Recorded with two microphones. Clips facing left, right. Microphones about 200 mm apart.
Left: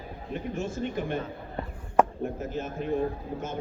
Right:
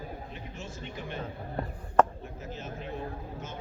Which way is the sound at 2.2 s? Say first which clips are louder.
Left 9 dB; 50° left (ahead or behind).